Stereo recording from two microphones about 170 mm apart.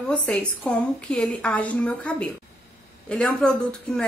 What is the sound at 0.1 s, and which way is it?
A woman's voice, 10° left (ahead or behind).